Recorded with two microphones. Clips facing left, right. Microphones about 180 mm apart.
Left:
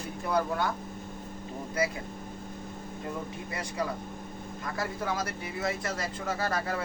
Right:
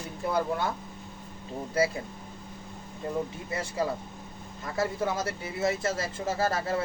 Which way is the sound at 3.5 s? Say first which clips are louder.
Right 3 dB; 25° right (ahead or behind).